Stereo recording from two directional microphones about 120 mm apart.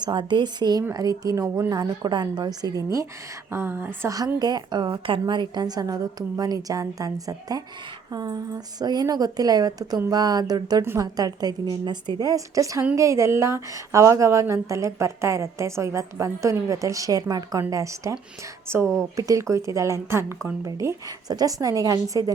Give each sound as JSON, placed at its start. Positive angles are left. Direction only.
{"t": 0.0, "sound": "a woman's voice", "side_deg": -40}
{"t": 4.4, "sound": "a woman's voice", "side_deg": -35}